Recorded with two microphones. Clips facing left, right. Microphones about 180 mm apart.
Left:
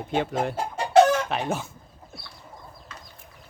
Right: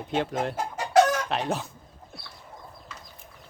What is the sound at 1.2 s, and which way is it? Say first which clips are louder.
Speech: left 1 dB; centre (ahead or behind).